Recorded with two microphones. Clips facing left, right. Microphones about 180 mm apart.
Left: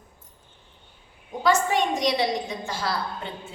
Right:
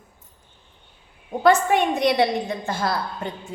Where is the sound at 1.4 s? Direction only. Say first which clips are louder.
Right 4 dB; 55° right (ahead or behind).